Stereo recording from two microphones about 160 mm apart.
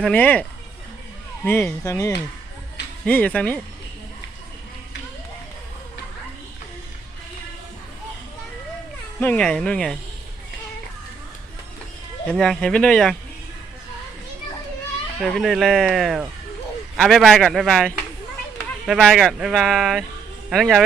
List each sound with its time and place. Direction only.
0.0 s speech: 10° left (ahead or behind)
1.5 s speech: 10° left (ahead or behind)
3.1 s speech: 10° left (ahead or behind)
9.2 s speech: 10° left (ahead or behind)
12.3 s speech: 5° left (ahead or behind)
15.2 s speech: centre (ahead or behind)